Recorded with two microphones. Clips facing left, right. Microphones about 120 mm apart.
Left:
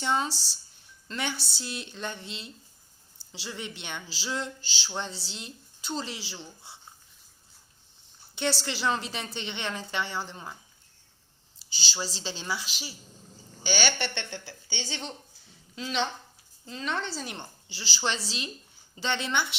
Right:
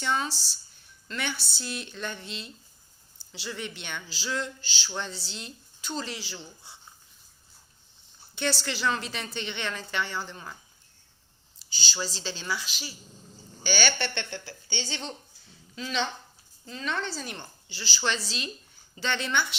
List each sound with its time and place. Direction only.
0.0 s a woman's voice: 30° left (ahead or behind)
3.2 s a sound: 35° left (ahead or behind)
3.6 s a woman's voice: 25° left (ahead or behind)
8.4 s a woman's voice: 25° left (ahead or behind)
11.8 s a woman's voice: 25° left (ahead or behind)